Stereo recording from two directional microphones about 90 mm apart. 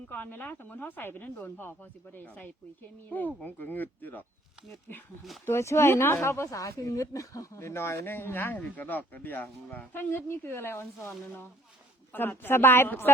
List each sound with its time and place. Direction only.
0.1 s speech: 20° left (ahead or behind)
5.5 s speech: 30° left (ahead or behind)
12.1 s speech: 20° left (ahead or behind)